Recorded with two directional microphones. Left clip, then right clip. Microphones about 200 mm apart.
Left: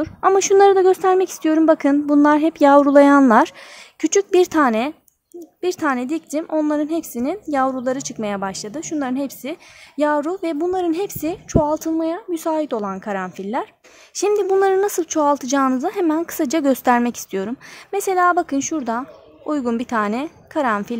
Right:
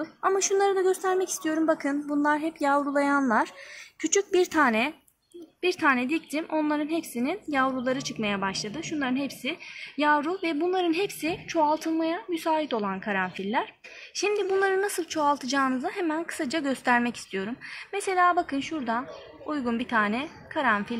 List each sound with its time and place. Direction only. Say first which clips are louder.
0.0 s a woman's voice: left 9 dB; 55° left (ahead or behind)